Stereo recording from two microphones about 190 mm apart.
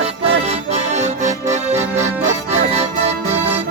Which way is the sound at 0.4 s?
35° right (ahead or behind).